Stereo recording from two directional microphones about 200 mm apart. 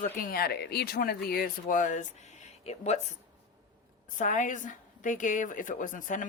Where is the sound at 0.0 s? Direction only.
45° left (ahead or behind).